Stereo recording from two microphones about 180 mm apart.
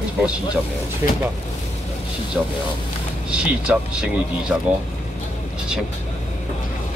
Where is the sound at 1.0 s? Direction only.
15° right (ahead or behind).